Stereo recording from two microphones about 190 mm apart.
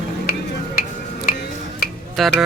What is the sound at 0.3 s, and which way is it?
Music, 55° left (ahead or behind).